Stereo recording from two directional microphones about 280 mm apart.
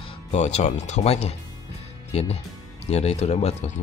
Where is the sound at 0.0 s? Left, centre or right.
Left.